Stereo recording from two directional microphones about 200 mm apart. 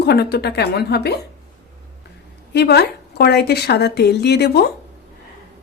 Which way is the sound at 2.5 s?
55° left (ahead or behind).